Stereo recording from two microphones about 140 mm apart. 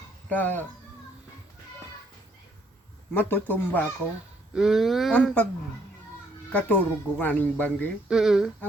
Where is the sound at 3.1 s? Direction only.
15° left (ahead or behind).